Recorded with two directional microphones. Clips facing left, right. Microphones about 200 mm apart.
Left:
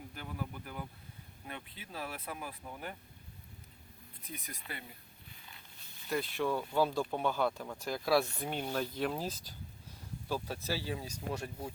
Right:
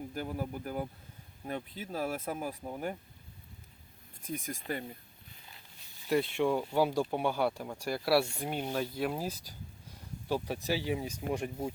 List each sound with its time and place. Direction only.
0.1 s speech: 40° right (ahead or behind)
4.2 s speech: 45° right (ahead or behind)
6.1 s speech: 25° right (ahead or behind)